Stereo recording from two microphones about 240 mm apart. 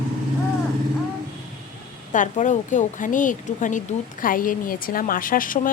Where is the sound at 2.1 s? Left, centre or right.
Left.